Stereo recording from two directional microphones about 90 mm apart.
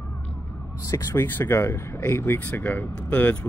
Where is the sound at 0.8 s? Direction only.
35° left (ahead or behind).